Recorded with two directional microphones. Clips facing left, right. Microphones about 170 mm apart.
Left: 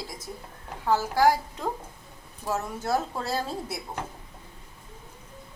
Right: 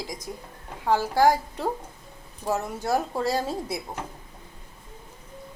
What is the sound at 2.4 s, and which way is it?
Speech, 10° right (ahead or behind).